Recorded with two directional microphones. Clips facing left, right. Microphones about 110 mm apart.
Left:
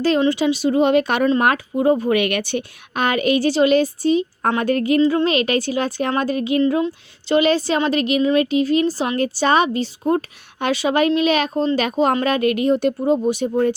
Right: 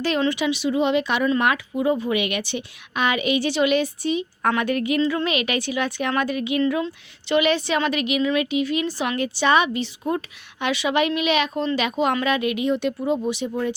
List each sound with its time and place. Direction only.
0.3 s a woman's voice: 35° left (ahead or behind); by 13.7 s 50° left (ahead or behind)